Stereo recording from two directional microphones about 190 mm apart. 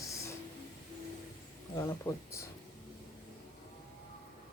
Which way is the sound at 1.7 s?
15° left (ahead or behind).